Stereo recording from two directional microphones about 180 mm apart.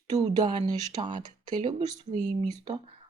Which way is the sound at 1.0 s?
25° right (ahead or behind).